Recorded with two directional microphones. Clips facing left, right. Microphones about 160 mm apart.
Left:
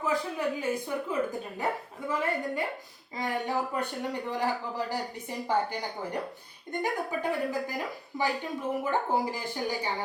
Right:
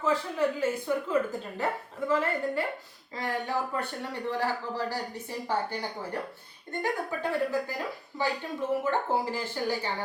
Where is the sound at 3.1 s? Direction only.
15° left (ahead or behind).